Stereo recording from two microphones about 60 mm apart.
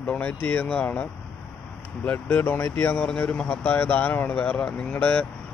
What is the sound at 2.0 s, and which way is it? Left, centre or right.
Speech, left.